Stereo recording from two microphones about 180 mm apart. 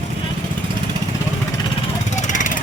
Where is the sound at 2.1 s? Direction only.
45° left (ahead or behind).